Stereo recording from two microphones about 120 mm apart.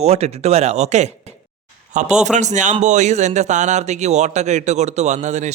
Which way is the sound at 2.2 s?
75° right (ahead or behind).